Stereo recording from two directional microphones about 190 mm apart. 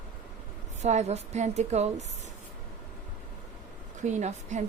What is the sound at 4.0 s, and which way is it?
Speech, 40° right (ahead or behind).